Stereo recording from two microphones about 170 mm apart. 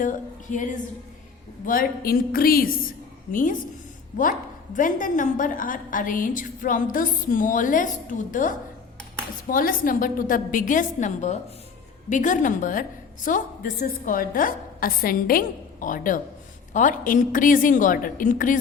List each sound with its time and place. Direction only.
0.0 s a woman's voice: 50° left (ahead or behind)